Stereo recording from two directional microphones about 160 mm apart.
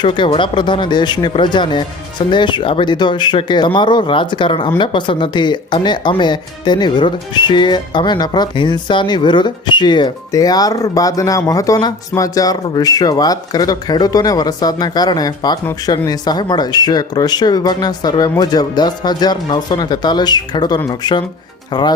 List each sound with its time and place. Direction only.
0.0 s speech: 30° left (ahead or behind)